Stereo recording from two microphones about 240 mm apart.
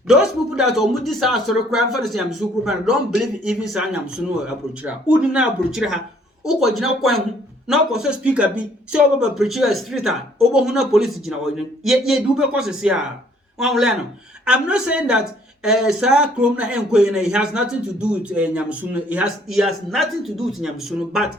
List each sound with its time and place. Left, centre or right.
0.1 s speech: centre
3.4 s speech: centre